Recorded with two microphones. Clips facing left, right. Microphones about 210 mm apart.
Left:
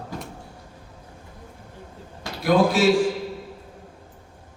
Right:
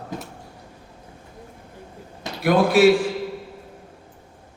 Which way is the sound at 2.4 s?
60° right (ahead or behind).